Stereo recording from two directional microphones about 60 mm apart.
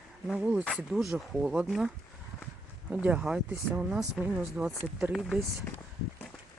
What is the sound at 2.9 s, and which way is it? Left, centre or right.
Speech, right.